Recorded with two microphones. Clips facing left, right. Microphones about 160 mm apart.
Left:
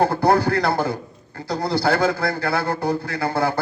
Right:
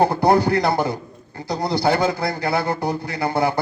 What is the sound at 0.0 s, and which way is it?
A man's voice, 15° right (ahead or behind).